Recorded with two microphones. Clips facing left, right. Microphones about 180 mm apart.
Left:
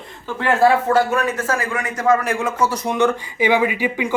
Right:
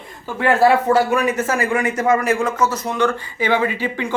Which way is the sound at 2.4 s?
10° left (ahead or behind).